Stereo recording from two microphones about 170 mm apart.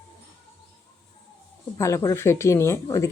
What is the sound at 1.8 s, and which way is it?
Speech, 15° left (ahead or behind).